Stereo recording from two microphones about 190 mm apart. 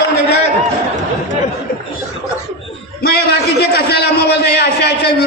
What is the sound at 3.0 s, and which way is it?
A man's voice, 55° left (ahead or behind).